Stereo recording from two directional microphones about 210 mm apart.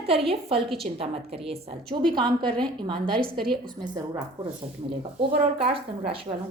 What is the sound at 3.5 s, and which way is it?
Speech, 20° right (ahead or behind).